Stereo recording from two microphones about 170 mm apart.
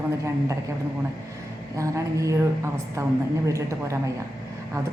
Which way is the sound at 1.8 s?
20° right (ahead or behind).